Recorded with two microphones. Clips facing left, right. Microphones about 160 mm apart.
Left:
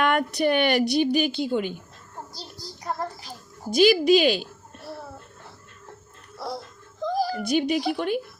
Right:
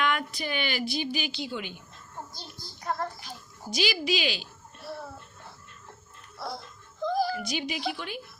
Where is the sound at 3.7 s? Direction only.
55° left (ahead or behind).